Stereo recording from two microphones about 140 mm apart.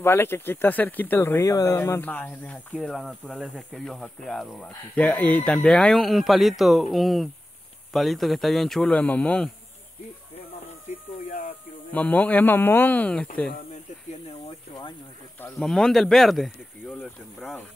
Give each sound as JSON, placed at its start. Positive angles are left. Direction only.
{"t": 0.0, "sound": "speech", "side_deg": 15}
{"t": 11.2, "sound": "a sound", "side_deg": 80}
{"t": 11.9, "sound": "speech", "side_deg": 10}
{"t": 15.6, "sound": "speech", "side_deg": 5}